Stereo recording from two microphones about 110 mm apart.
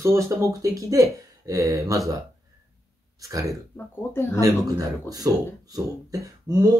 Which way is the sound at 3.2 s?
30° right (ahead or behind).